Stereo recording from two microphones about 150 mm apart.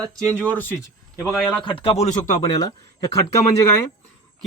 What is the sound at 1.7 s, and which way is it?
Speech, 40° left (ahead or behind).